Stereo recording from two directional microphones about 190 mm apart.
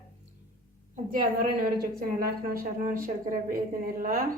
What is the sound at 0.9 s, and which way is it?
A woman's voice, 45° right (ahead or behind).